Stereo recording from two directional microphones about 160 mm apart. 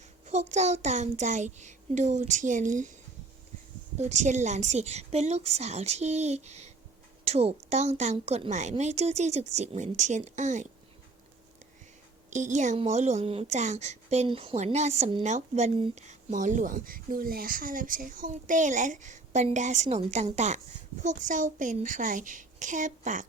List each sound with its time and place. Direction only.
0.3 s a woman's voice: 45° right (ahead or behind)
3.9 s a woman's voice: 45° right (ahead or behind)
12.3 s a woman's voice: 50° right (ahead or behind)